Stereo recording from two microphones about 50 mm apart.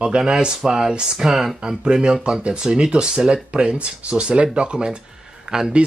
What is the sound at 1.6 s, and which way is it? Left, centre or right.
Speech, centre.